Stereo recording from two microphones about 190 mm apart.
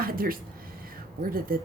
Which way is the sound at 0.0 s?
50° right (ahead or behind).